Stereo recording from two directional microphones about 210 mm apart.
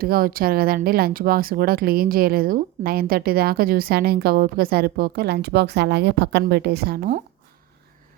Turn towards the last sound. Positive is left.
turn(degrees=-45)  # may be behind; listen again after turning